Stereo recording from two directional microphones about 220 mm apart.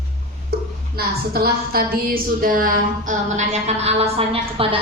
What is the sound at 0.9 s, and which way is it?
A woman's voice, 45° right (ahead or behind).